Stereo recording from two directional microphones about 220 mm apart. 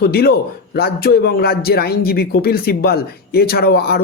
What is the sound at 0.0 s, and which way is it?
A man's voice, 45° left (ahead or behind).